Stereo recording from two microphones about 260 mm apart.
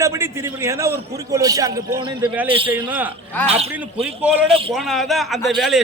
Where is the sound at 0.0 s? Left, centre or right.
Centre.